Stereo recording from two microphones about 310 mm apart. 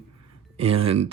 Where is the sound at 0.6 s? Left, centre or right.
Right.